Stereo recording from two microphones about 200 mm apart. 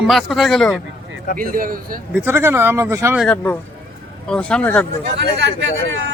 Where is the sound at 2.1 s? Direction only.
10° right (ahead or behind).